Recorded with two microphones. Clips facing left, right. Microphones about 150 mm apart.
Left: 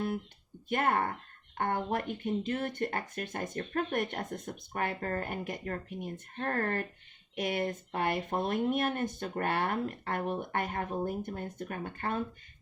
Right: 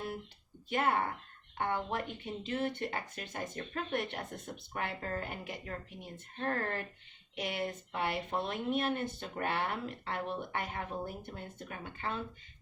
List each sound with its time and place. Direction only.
0.7 s speech: 50° left (ahead or behind)